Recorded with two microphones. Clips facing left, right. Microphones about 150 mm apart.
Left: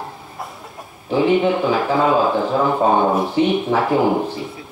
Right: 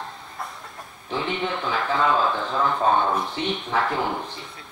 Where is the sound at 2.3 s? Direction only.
40° left (ahead or behind).